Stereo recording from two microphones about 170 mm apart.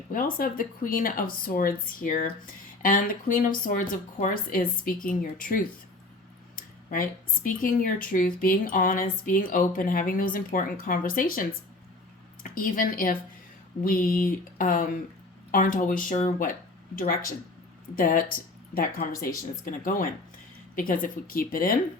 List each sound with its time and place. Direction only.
0.1 s a woman's voice: 55° left (ahead or behind)